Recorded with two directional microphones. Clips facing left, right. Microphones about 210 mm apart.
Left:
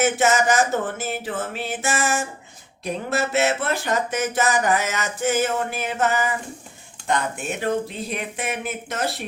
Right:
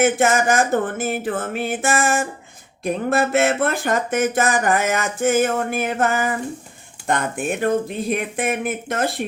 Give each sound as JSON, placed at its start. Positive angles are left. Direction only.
{"t": 0.0, "sound": "speech", "side_deg": -55}